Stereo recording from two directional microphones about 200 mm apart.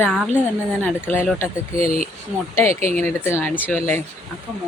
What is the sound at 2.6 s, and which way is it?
Speech, 30° right (ahead or behind).